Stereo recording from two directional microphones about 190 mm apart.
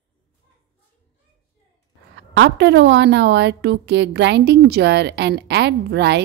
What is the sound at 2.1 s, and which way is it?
A woman's voice, 70° right (ahead or behind).